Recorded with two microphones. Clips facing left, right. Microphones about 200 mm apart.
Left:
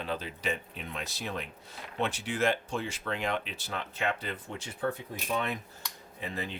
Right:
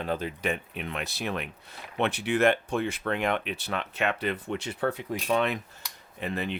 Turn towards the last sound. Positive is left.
turn(degrees=-65)  # may be behind; listen again after turning